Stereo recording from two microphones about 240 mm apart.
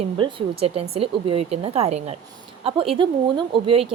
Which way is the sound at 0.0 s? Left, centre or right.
Right.